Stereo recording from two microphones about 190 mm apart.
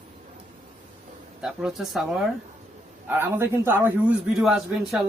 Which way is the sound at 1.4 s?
Centre (ahead or behind).